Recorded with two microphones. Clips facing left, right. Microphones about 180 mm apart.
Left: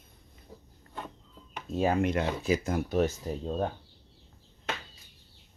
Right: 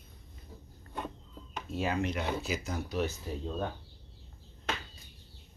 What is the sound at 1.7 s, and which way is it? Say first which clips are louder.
Speech: left 6 dB; 45° left (ahead or behind).